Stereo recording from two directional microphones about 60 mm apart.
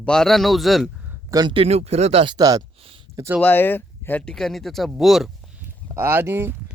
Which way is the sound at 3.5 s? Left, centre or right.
Left.